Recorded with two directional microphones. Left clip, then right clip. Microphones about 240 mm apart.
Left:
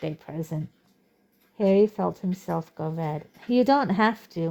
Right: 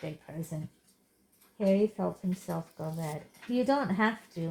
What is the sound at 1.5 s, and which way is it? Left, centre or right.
Speech, left.